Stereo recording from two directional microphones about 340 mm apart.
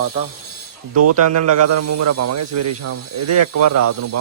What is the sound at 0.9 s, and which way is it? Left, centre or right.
A man's voice, right.